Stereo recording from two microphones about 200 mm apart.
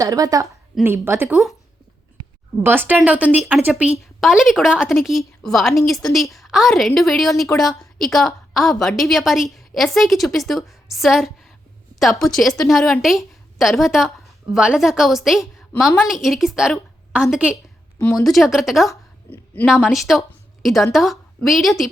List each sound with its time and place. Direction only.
0.0 s speech: 15° right (ahead or behind)
2.6 s a woman's voice: 10° right (ahead or behind)
18.9 s a sound: 10° left (ahead or behind)
19.6 s a woman's voice: 5° right (ahead or behind)